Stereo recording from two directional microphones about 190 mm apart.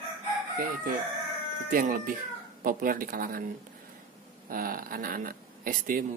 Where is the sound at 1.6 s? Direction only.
45° right (ahead or behind).